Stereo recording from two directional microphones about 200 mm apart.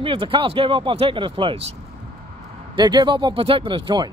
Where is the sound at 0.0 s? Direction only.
25° right (ahead or behind).